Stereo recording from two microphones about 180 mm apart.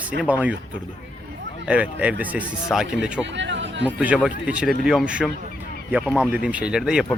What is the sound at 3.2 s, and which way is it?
Chatter, 80° right.